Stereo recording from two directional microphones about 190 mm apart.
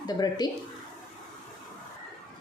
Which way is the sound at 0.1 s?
20° left (ahead or behind).